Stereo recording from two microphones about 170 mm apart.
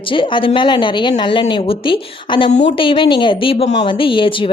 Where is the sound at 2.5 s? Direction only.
40° left (ahead or behind).